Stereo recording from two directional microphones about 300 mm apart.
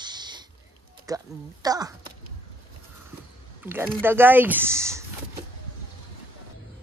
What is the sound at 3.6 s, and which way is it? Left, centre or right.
Speech, centre.